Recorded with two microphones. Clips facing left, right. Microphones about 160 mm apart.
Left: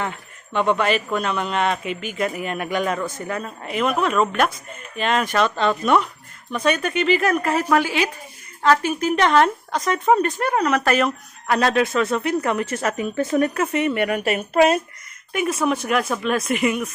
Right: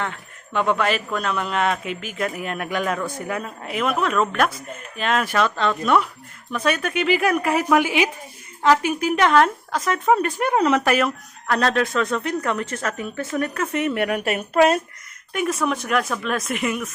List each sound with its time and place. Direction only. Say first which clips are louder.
0.0 s speech: left 1 dB; centre (ahead or behind); by 10.8 s 20° right (ahead or behind)
10.8 s speech: left 1 dB; 5° right (ahead or behind); by 13.7 s 15° left (ahead or behind)
13.7 s speech: right 1 dB; centre (ahead or behind)